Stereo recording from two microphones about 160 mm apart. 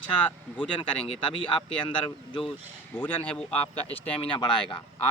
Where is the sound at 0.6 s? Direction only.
30° left (ahead or behind).